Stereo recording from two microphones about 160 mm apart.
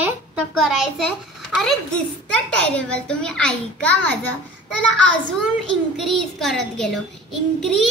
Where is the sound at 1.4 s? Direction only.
Centre (ahead or behind).